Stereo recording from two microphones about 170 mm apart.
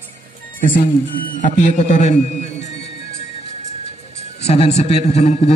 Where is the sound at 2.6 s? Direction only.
40° left (ahead or behind).